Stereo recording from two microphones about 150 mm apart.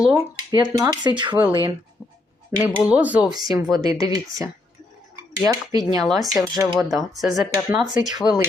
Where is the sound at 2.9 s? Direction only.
10° right (ahead or behind).